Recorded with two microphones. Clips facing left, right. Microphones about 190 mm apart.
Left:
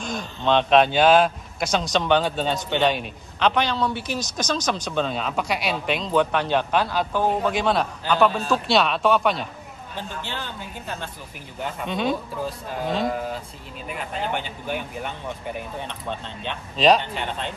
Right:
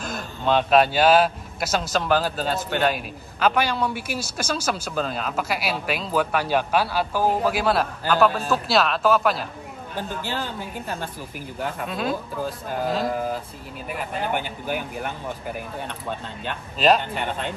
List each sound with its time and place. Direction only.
0.0 s a man's voice: 5° right (ahead or behind)
11.6 s a man's voice: 5° right (ahead or behind)